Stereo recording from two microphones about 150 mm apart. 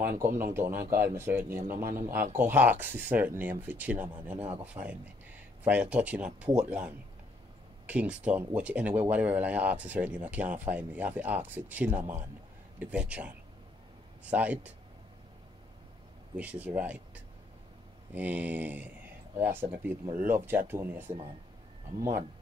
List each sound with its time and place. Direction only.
0.4 s speech: 15° right (ahead or behind)
1.8 s speech: 70° right (ahead or behind)
2.3 s speech: 10° right (ahead or behind)
7.8 s speech: 10° right (ahead or behind)
16.3 s speech: 10° right (ahead or behind)